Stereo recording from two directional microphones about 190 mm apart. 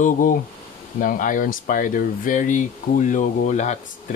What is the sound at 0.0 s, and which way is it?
Speech, 45° left (ahead or behind).